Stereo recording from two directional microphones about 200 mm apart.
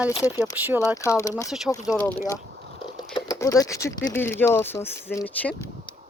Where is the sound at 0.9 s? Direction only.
15° left (ahead or behind).